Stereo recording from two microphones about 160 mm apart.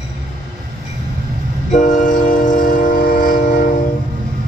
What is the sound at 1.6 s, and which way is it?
Train, 50° left (ahead or behind).